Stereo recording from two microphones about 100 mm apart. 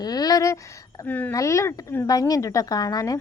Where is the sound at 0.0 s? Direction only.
40° left (ahead or behind).